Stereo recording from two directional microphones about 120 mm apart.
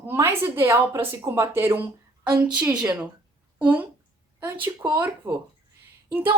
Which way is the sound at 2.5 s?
10° right (ahead or behind).